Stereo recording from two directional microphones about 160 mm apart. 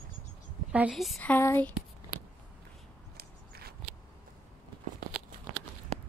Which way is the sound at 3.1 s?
75° right (ahead or behind).